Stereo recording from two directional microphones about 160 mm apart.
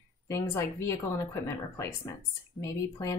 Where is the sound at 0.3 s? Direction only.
15° left (ahead or behind).